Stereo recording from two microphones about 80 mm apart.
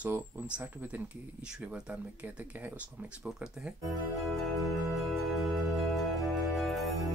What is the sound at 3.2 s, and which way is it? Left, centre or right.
Speech, centre.